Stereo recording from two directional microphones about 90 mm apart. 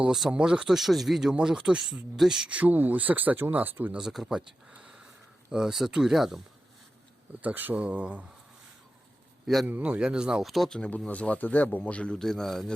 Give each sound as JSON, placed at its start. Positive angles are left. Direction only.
{"t": 0.0, "sound": "speech", "side_deg": -5}
{"t": 3.9, "sound": "speech", "side_deg": -5}
{"t": 7.4, "sound": "speech", "side_deg": -20}
{"t": 9.6, "sound": "speech", "side_deg": -20}